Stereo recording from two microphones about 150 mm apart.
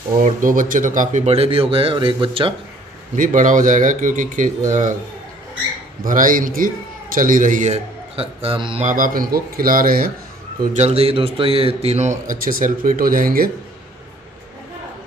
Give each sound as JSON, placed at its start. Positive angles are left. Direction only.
{"t": 0.2, "sound": "a man's voice", "side_deg": -65}
{"t": 3.2, "sound": "a man's voice", "side_deg": -60}
{"t": 6.0, "sound": "a man's voice", "side_deg": -65}
{"t": 8.8, "sound": "speech", "side_deg": -65}
{"t": 10.7, "sound": "a man's voice", "side_deg": -45}